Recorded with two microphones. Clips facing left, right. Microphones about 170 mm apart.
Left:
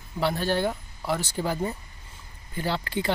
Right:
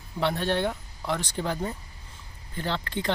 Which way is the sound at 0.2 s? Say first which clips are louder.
Left 1 dB; centre (ahead or behind).